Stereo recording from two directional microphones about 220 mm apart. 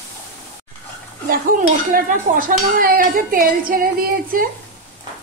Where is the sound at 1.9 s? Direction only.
40° right (ahead or behind).